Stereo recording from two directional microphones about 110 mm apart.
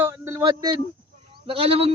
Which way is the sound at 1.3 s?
55° right (ahead or behind).